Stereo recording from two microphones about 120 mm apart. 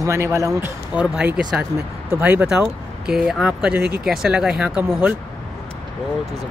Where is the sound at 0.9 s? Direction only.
10° right (ahead or behind).